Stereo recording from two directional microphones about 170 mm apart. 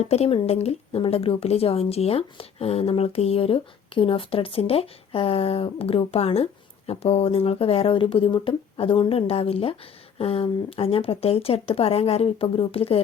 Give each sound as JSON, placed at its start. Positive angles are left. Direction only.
{"t": 0.0, "sound": "speech", "side_deg": 40}